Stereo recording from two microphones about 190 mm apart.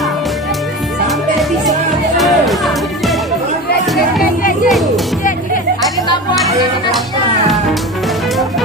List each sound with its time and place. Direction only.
2.1 s music: centre (ahead or behind)
4.2 s music: 45° left (ahead or behind)
4.6 s music: centre (ahead or behind)